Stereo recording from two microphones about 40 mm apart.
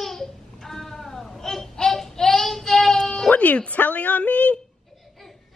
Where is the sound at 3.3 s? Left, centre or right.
Left.